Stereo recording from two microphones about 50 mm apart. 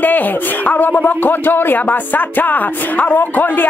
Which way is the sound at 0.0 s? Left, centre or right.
Left.